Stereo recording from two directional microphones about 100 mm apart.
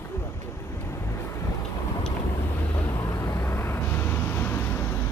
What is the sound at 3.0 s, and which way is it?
Vehicle, 30° left (ahead or behind).